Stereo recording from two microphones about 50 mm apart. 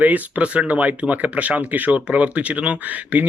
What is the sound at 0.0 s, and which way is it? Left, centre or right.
Speech, right.